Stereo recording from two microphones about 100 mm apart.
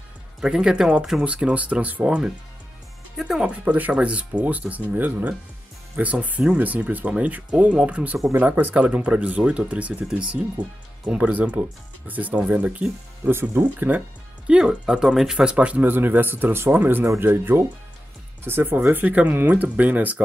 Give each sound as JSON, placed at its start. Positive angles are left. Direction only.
{"t": 0.4, "sound": "speech", "side_deg": -10}
{"t": 13.3, "sound": "speech", "side_deg": -25}